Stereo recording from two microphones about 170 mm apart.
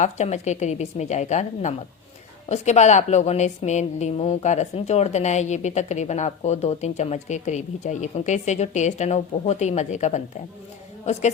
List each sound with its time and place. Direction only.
0.0 s a woman's voice: 40° left (ahead or behind)